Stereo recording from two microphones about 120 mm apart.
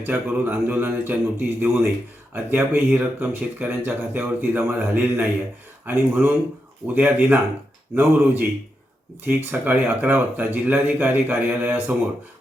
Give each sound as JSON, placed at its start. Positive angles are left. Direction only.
{"t": 0.0, "sound": "speech", "side_deg": -15}